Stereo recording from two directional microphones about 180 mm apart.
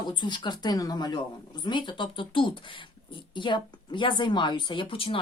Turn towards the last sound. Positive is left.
turn(degrees=30)  # may be behind; listen again after turning